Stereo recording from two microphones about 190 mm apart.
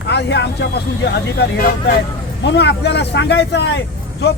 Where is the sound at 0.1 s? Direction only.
65° left (ahead or behind).